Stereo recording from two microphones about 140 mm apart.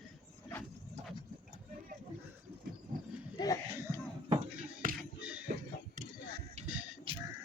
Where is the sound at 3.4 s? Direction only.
30° left (ahead or behind).